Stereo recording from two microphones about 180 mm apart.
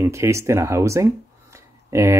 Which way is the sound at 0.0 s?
15° right (ahead or behind).